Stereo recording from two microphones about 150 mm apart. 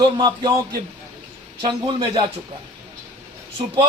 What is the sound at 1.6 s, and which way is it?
Speech, 35° right (ahead or behind).